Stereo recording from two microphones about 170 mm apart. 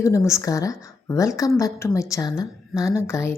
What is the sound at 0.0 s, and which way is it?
A woman's voice, 20° left (ahead or behind).